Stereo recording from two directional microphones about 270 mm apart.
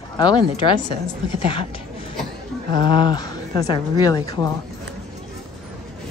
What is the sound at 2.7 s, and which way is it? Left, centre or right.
Speech, centre.